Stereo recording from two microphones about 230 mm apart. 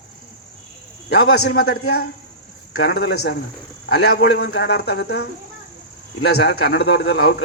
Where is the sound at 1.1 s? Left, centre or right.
Left.